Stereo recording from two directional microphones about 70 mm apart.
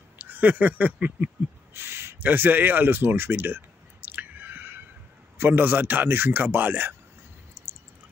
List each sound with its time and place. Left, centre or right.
0.2 s speech: right
1.7 s a sound: right
5.4 s speech: right